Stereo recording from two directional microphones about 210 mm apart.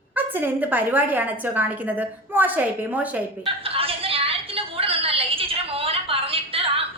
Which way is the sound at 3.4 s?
25° right (ahead or behind).